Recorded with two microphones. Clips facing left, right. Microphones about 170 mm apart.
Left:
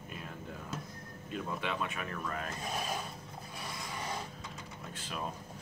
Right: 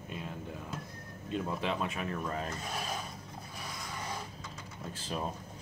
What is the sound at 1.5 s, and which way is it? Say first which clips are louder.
Speech: right 3 dB; 30° right (ahead or behind).